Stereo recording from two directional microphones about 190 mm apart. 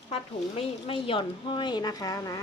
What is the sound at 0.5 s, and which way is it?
A woman's voice, 30° left (ahead or behind).